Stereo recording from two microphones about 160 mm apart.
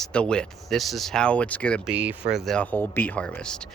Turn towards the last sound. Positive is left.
turn(degrees=5)  # may be behind; listen again after turning